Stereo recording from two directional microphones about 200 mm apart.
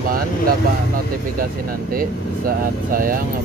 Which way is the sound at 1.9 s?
45° right (ahead or behind).